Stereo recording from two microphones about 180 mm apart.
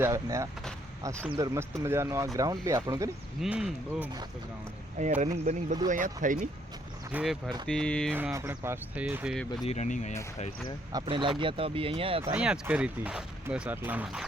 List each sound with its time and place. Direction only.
0.0 s speech: 15° right (ahead or behind)
3.4 s speech: 5° right (ahead or behind)
5.0 s speech: 40° right (ahead or behind)
7.1 s speech: 5° right (ahead or behind)
8.1 s speech: 15° right (ahead or behind)
9.3 s speech: centre (ahead or behind)
9.6 s speech: 40° left (ahead or behind)
11.0 s speech: 25° right (ahead or behind)
12.2 s speech: 5° right (ahead or behind)